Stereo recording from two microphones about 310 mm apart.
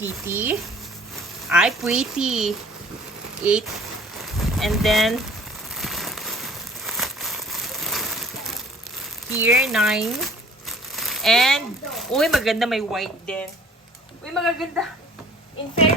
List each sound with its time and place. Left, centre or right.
0.0 s speech: centre
4.2 s speech: centre
5.7 s crumpling: centre
9.3 s speech: centre